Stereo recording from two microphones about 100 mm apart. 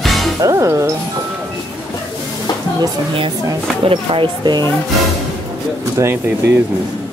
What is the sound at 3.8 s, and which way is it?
Speech, 65° right (ahead or behind).